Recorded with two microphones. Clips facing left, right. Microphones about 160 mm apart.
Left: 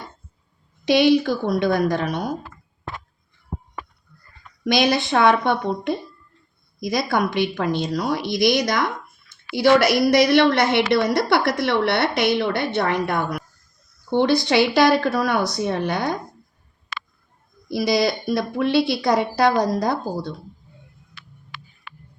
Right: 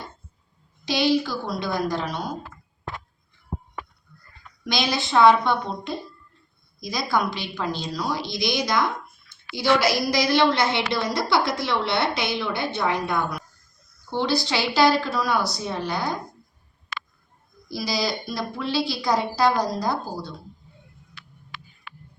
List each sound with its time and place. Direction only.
0.9 s a woman's voice: 70° left (ahead or behind)
4.6 s a woman's voice: 70° left (ahead or behind)
6.7 s a woman's voice: 65° left (ahead or behind)
17.7 s a woman's voice: 65° left (ahead or behind)